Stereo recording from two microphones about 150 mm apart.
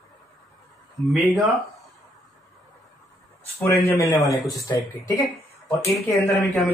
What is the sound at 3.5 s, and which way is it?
Speech, 20° left (ahead or behind).